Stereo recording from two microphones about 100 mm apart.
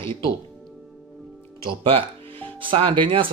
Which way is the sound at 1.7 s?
60° right (ahead or behind).